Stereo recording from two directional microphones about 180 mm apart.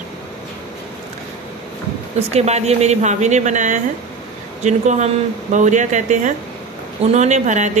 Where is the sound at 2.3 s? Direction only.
35° right (ahead or behind).